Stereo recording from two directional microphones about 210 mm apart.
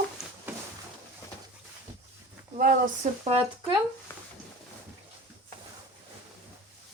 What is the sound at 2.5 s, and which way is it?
Speech, 40° right (ahead or behind).